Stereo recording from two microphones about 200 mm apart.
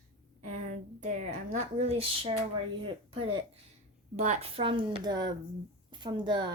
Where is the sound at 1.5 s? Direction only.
30° right (ahead or behind).